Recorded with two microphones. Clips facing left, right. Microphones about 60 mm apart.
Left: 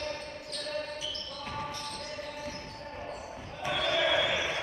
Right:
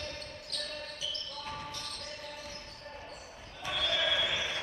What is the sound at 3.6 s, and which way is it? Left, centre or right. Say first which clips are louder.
Basketball bounce: left 4 dB; left.